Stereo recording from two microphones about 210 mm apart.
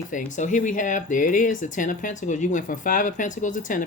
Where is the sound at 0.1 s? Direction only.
35° left (ahead or behind).